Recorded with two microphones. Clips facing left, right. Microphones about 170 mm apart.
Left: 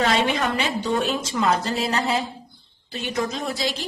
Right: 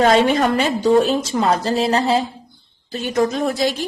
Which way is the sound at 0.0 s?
40° right (ahead or behind).